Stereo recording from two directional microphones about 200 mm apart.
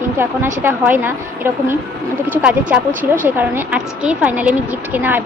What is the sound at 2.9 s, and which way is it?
Speech, 40° right (ahead or behind).